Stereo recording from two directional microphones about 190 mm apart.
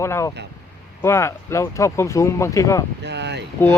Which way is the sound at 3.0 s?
65° right (ahead or behind).